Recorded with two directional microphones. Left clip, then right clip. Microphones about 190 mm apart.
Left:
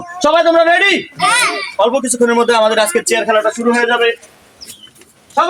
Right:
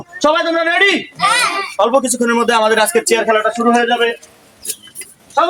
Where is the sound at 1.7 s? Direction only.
20° right (ahead or behind); by 3.9 s centre (ahead or behind).